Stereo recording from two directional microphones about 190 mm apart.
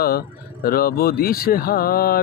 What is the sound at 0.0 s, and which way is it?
Speech, 55° left (ahead or behind).